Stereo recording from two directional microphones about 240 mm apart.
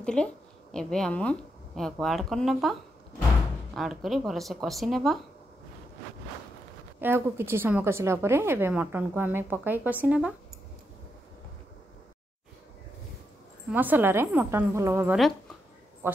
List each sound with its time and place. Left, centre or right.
0.0 s a woman's voice: centre
7.0 s a woman's voice: centre
13.7 s a woman's voice: centre